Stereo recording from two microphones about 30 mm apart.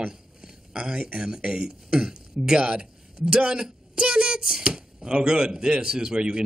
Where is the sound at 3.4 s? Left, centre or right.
Right.